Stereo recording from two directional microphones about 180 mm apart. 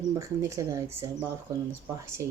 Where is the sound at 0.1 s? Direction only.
20° right (ahead or behind).